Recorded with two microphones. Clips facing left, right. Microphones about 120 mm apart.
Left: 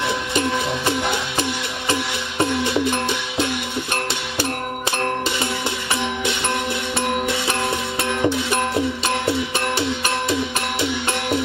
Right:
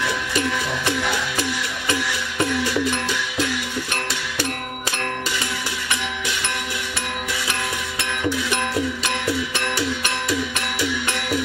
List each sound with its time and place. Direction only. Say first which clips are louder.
0.0 s music: left 2 dB; 25° left (ahead or behind)
8.0 s music: left 3 dB; 25° left (ahead or behind)